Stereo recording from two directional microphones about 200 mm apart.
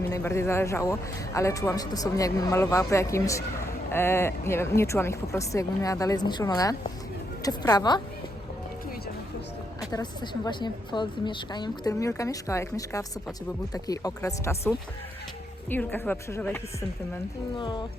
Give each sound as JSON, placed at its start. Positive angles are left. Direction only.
{"t": 0.1, "sound": "a man's voice", "side_deg": 15}
{"t": 9.9, "sound": "a woman's voice", "side_deg": 20}
{"t": 17.6, "sound": "a woman's voice", "side_deg": 20}